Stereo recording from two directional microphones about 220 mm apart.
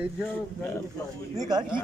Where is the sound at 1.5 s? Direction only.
20° right (ahead or behind).